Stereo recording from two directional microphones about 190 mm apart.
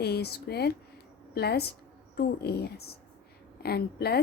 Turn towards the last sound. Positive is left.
turn(degrees=55)  # may be behind; listen again after turning